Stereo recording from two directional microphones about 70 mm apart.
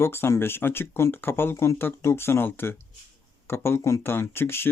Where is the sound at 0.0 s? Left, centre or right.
Left.